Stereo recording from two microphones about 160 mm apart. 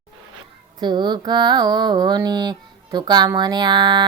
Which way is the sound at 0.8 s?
25° right (ahead or behind).